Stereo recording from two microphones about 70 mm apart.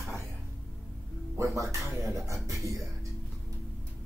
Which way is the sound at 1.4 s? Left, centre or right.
Right.